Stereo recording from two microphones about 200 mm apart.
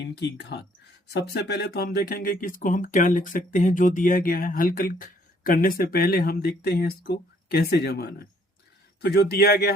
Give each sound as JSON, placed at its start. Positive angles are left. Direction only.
{"t": 0.0, "sound": "speech", "side_deg": 60}